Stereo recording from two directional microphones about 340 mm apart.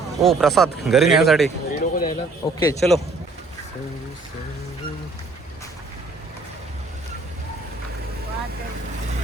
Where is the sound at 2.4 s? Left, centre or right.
Centre.